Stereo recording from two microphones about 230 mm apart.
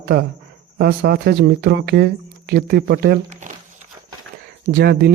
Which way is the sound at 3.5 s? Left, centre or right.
Right.